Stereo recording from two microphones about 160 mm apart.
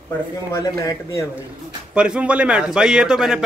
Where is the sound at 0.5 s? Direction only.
20° left (ahead or behind).